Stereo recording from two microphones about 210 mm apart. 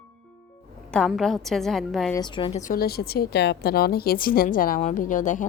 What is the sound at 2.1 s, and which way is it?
Speech, 20° left (ahead or behind).